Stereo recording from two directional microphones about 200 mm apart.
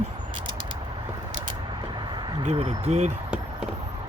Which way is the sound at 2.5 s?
35° right (ahead or behind).